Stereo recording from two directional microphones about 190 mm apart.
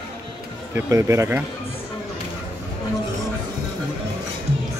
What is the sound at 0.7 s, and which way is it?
Speech, 15° right (ahead or behind).